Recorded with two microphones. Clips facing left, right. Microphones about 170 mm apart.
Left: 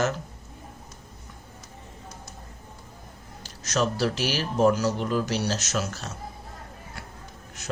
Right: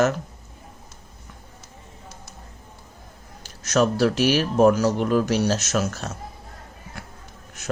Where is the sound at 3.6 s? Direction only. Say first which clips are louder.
Right 6 dB; 55° right (ahead or behind).